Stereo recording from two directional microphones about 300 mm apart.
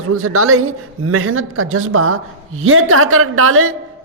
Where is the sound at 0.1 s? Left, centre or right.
Right.